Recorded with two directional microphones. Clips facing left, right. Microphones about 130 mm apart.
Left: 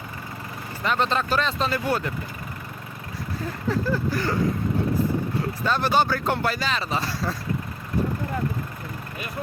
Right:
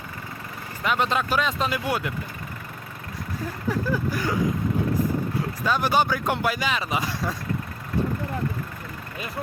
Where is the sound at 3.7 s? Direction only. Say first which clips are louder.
Left 1 dB; 10° right (ahead or behind).